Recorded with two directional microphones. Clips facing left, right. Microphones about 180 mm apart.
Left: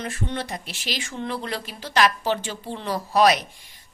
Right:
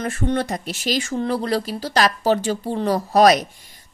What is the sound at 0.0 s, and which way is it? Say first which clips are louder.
Speech: right 7 dB; 45° right (ahead or behind).